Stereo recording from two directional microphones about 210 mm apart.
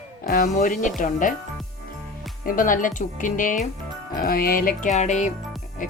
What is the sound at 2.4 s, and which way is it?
Speech, 40° left (ahead or behind).